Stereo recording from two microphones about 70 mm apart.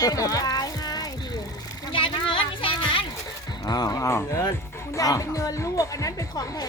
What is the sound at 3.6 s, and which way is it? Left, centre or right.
A woman's voice, left.